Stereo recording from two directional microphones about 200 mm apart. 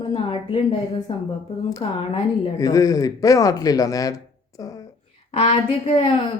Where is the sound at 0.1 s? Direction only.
25° left (ahead or behind).